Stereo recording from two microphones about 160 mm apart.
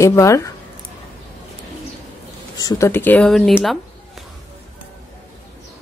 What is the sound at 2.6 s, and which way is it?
Speech, 20° left (ahead or behind).